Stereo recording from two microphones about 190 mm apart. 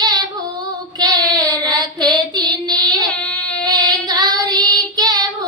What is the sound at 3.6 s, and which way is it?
Child singing, 20° right (ahead or behind).